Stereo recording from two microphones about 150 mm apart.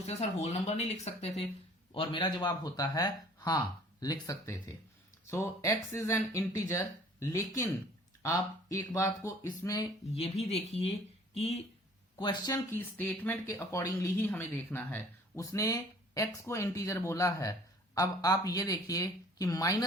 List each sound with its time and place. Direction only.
0.0 s speech: 45° left (ahead or behind)
1.9 s speech: 30° left (ahead or behind)
10.2 s speech: 45° left (ahead or behind)
12.1 s speech: 30° left (ahead or behind)
12.7 s speech: 10° left (ahead or behind)